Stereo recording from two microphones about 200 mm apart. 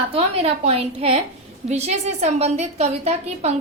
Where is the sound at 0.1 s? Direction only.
30° right (ahead or behind).